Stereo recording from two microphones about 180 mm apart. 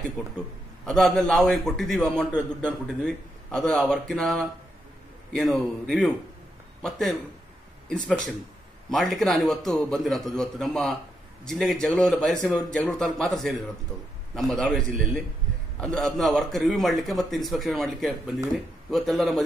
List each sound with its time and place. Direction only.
0.8 s a man's voice: centre (ahead or behind)
8.9 s a man's voice: centre (ahead or behind)